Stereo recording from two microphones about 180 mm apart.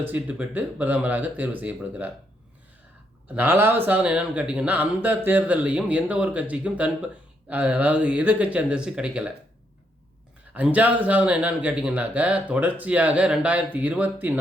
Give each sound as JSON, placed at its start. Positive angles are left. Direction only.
{"t": 0.0, "sound": "speech", "side_deg": -10}
{"t": 3.3, "sound": "speech", "side_deg": -10}
{"t": 10.5, "sound": "speech", "side_deg": -10}